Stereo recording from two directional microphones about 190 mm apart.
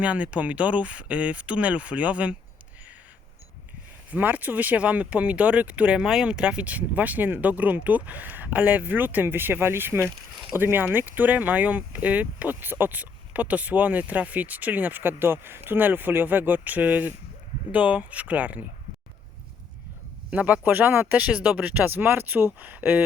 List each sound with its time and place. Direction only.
0.0 s speech: 5° right (ahead or behind)
4.1 s speech: 10° right (ahead or behind)
20.3 s speech: 10° right (ahead or behind)